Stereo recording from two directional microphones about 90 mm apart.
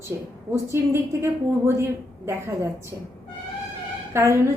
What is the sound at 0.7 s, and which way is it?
A woman's voice, 30° right (ahead or behind).